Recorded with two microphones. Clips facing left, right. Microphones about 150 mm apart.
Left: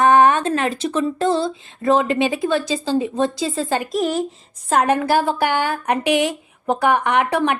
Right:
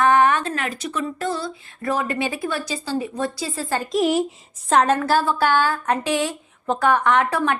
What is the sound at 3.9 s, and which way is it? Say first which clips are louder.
Speech: right 5 dB; 5° right (ahead or behind).